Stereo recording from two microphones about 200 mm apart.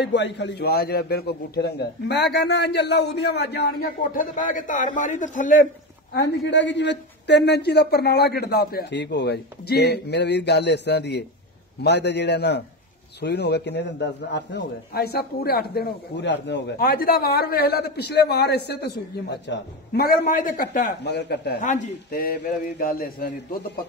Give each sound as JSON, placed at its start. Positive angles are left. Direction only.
{"t": 0.0, "sound": "a man's voice", "side_deg": 60}
{"t": 6.1, "sound": "a man's voice", "side_deg": 60}
{"t": 21.6, "sound": "a man's voice", "side_deg": 45}